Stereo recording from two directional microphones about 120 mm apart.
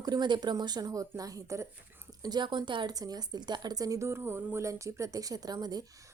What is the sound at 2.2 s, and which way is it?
A woman's voice, 35° right (ahead or behind).